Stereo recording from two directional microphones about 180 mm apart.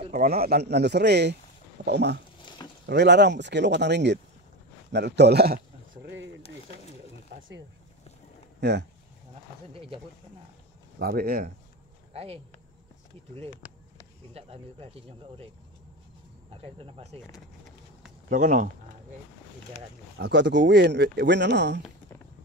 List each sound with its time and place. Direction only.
0.1 s a man's voice: 50° right (ahead or behind)
8.5 s speech: 70° right (ahead or behind)
11.0 s a man's voice: 60° right (ahead or behind)
12.1 s speech: 35° right (ahead or behind)
14.3 s speech: 35° right (ahead or behind)
16.5 s speech: 30° right (ahead or behind)
18.3 s speech: 45° right (ahead or behind)
20.2 s speech: 70° right (ahead or behind)